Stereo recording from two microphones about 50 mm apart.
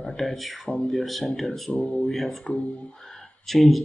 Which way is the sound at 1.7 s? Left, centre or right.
Centre.